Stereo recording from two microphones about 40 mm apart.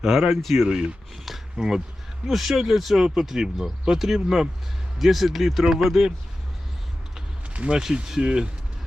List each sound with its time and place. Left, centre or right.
0.0 s speech: centre
0.7 s speech: right
1.1 s speech: centre
1.5 s speech: centre
2.2 s speech: centre
7.5 s speech: right
8.0 s speech: centre